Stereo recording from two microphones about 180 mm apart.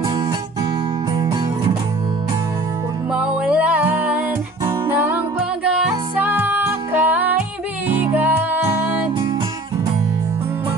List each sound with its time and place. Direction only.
1.1 s music: 25° right (ahead or behind)
3.2 s music: 5° right (ahead or behind)